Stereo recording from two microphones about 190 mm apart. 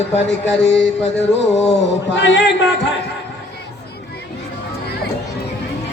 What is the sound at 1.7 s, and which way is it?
A man's voice, 65° left (ahead or behind).